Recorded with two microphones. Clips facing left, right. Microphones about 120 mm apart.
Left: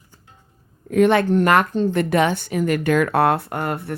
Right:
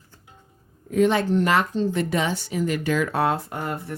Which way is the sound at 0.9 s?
60° left (ahead or behind).